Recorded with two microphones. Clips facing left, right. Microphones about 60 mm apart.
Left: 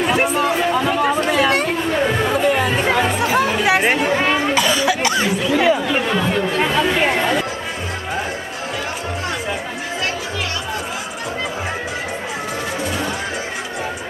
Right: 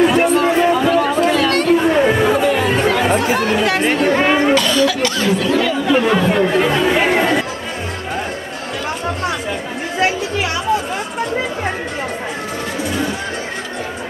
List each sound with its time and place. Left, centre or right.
0.0 s a sound: centre
0.8 s chatter: centre
2.0 s chatter: centre
2.4 s chatter: centre
4.2 s cough: centre
4.6 s cough: centre
6.0 s chatter: centre